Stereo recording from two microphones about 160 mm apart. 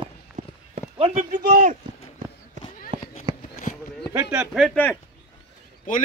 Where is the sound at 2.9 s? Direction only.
30° right (ahead or behind).